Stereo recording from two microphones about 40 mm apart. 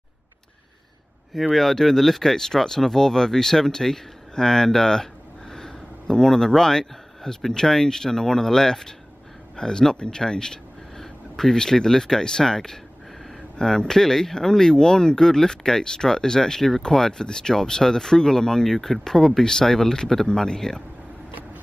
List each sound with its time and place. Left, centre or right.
1.3 s speech: centre